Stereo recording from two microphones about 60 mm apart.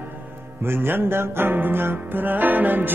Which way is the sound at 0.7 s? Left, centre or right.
Right.